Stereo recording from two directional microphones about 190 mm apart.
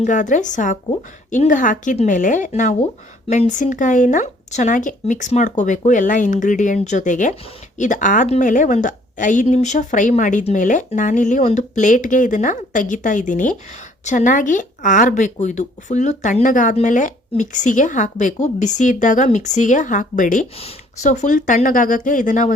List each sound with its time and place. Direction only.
0.0 s speech: 40° left (ahead or behind)